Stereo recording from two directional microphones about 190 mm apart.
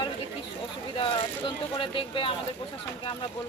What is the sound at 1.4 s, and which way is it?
Speech, 25° left (ahead or behind).